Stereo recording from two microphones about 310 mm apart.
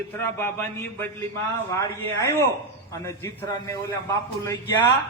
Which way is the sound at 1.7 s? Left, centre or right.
Centre.